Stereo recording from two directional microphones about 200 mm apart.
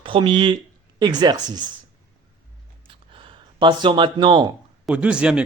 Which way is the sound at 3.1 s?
25° right (ahead or behind).